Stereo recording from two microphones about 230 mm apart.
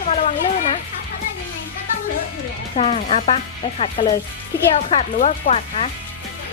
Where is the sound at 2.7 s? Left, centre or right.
Left.